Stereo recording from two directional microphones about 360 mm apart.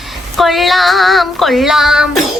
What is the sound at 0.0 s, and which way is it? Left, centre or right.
Child singing, centre.